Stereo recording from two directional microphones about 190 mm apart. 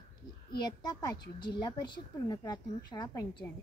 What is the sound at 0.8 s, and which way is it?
A woman's voice, 20° left (ahead or behind).